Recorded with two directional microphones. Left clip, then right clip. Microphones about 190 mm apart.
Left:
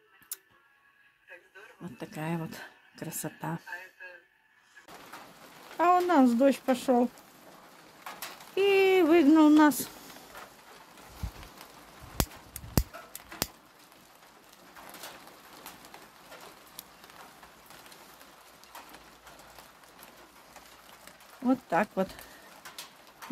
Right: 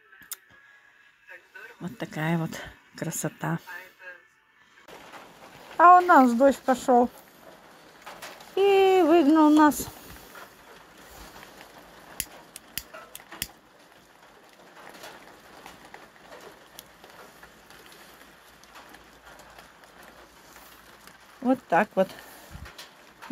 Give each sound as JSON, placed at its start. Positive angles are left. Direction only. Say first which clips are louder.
{"t": 1.8, "sound": "speech", "louder": "right 7 dB", "side_deg": -15}
{"t": 5.8, "sound": "speech", "louder": "right 8 dB", "side_deg": 0}
{"t": 8.5, "sound": "speech", "louder": "right 4 dB", "side_deg": 0}
{"t": 21.5, "sound": "speech", "louder": "right 5 dB", "side_deg": -10}